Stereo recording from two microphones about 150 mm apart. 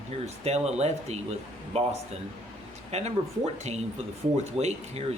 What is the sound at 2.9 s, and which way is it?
Speech, 45° right (ahead or behind).